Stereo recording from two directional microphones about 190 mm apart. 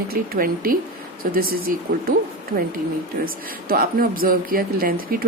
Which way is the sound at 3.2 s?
45° right (ahead or behind).